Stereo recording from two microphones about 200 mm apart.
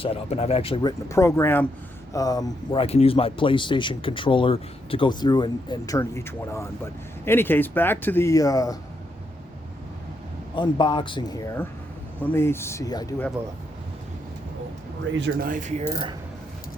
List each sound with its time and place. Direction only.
0.0 s speech: 30° left (ahead or behind)
2.8 s speech: 30° left (ahead or behind)
10.5 s speech: 25° left (ahead or behind)
15.2 s speech: 45° right (ahead or behind)